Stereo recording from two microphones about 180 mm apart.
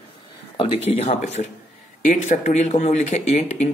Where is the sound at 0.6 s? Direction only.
35° left (ahead or behind).